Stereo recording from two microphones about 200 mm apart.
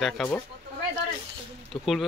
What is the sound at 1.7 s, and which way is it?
Speech, centre (ahead or behind).